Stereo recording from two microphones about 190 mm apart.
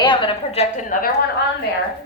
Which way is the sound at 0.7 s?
45° left (ahead or behind).